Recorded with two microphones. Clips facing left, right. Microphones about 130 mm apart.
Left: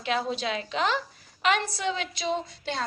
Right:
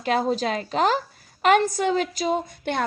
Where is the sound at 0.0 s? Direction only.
45° right (ahead or behind).